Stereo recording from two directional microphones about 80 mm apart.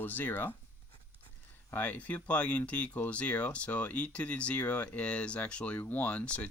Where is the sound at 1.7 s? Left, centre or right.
Left.